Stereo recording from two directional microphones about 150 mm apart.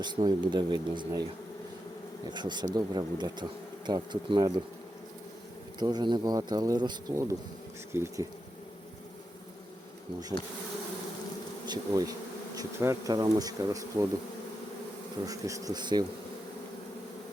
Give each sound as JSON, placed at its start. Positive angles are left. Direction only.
{"t": 0.0, "sound": "speech", "side_deg": -30}
{"t": 2.3, "sound": "bee", "side_deg": -30}
{"t": 5.8, "sound": "bee", "side_deg": -30}
{"t": 10.3, "sound": "bee", "side_deg": -10}
{"t": 11.7, "sound": "bee", "side_deg": -25}
{"t": 15.3, "sound": "bee", "side_deg": -20}